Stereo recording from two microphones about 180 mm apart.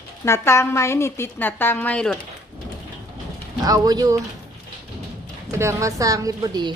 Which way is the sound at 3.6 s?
20° right (ahead or behind).